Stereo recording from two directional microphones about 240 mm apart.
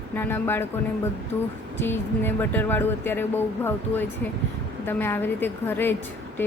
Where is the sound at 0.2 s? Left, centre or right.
Centre.